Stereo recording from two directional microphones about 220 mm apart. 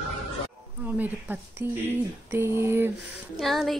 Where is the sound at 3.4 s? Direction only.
Centre (ahead or behind).